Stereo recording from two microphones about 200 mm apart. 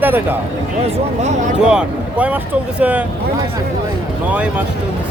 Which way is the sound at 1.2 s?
35° right (ahead or behind).